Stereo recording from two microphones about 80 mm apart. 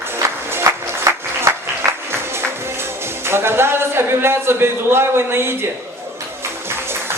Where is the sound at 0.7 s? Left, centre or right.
Right.